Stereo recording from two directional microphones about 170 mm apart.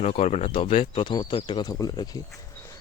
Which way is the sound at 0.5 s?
30° left (ahead or behind).